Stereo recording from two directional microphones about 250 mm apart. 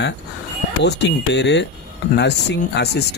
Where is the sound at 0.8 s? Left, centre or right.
Left.